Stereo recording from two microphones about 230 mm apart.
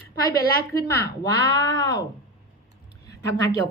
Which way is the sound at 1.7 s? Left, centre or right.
Centre.